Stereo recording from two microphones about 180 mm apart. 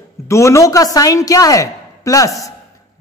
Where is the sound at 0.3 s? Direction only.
15° left (ahead or behind).